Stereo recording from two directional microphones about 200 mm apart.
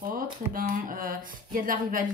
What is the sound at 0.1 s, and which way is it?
Speech, 45° right (ahead or behind).